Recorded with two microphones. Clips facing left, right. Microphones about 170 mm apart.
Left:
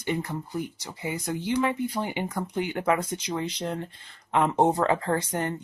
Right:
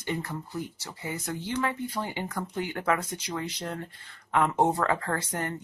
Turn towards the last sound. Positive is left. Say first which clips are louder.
# left 4 dB
turn(degrees=20)  # may be behind; listen again after turning